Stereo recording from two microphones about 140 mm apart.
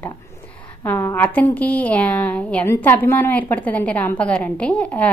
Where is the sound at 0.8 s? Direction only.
15° left (ahead or behind).